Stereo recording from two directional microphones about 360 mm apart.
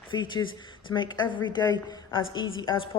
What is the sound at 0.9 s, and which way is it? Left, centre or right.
Speech, left.